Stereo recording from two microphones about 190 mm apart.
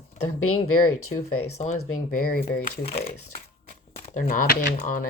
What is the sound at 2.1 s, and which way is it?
Speech, 50° left (ahead or behind).